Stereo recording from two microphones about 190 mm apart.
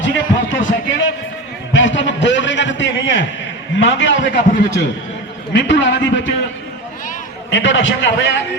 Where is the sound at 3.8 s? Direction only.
70° left (ahead or behind).